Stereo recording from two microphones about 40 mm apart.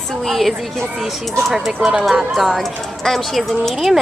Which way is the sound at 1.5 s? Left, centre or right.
Centre.